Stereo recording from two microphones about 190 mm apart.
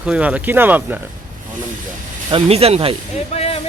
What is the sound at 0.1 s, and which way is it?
Speech, 5° right (ahead or behind).